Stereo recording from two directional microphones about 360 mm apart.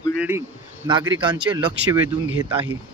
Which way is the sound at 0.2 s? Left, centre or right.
Centre.